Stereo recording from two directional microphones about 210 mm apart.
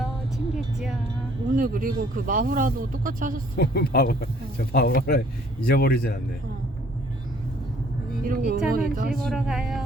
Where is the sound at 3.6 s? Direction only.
50° left (ahead or behind).